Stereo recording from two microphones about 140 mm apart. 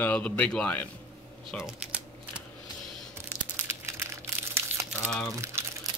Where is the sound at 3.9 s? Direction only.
20° right (ahead or behind).